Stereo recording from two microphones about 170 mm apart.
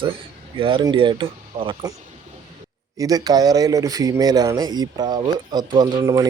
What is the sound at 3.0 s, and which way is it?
A man's voice, 20° right (ahead or behind).